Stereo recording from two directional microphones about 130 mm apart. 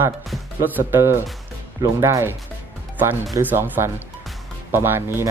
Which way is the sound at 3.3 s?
20° right (ahead or behind).